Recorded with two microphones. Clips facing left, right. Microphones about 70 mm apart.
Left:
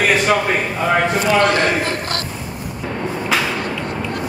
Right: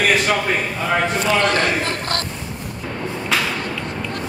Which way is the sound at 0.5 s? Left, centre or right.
Centre.